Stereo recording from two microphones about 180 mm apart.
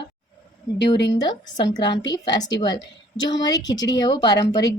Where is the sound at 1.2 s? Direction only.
25° left (ahead or behind).